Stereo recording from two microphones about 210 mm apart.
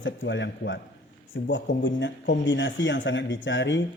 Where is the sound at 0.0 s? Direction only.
60° left (ahead or behind).